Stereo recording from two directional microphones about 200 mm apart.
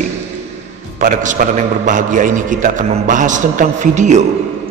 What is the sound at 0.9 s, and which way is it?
A man's voice, 40° right (ahead or behind).